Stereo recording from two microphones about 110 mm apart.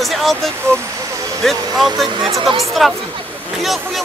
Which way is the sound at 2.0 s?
45° right (ahead or behind).